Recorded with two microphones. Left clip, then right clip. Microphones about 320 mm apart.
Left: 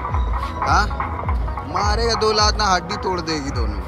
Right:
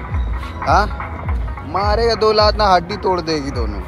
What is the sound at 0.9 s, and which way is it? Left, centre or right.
Music, left.